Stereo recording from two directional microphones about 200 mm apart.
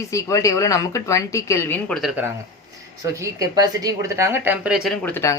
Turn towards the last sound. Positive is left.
turn(degrees=10)  # may be behind; listen again after turning